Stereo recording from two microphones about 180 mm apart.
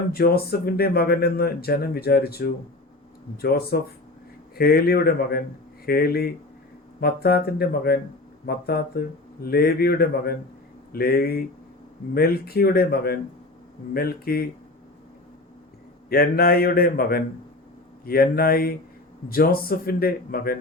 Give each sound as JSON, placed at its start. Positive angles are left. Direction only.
{"t": 0.1, "sound": "speech", "side_deg": 60}
{"t": 16.0, "sound": "speech", "side_deg": 55}